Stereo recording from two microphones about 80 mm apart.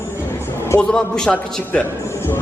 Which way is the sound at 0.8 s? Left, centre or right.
Centre.